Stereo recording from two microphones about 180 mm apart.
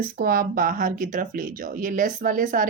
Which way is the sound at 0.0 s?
55° right (ahead or behind).